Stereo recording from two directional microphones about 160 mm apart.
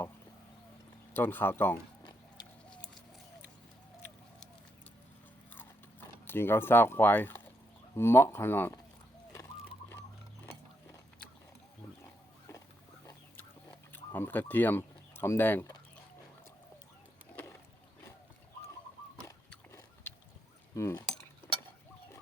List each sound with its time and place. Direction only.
1.1 s speech: 10° left (ahead or behind)
2.6 s chicken: 5° left (ahead or behind)
5.5 s keys jangling: 10° left (ahead or behind)
7.9 s speech: 15° left (ahead or behind)
12.0 s pig: 20° left (ahead or behind)
13.9 s speech: 10° left (ahead or behind)
20.7 s speech: 20° left (ahead or behind)
21.4 s a sound: 15° left (ahead or behind)